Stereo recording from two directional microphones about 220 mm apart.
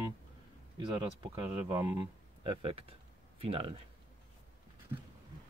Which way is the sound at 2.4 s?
25° right (ahead or behind).